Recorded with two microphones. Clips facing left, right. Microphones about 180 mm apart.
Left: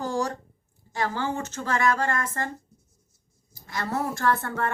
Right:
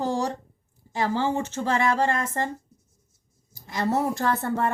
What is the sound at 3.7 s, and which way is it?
Speech, 25° right (ahead or behind).